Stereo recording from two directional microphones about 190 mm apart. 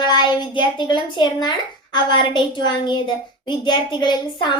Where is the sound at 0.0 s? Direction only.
25° left (ahead or behind).